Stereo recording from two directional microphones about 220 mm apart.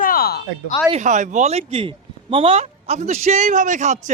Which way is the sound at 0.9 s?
35° right (ahead or behind).